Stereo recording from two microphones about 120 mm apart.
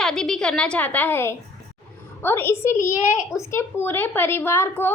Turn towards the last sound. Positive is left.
turn(degrees=20)  # may be behind; listen again after turning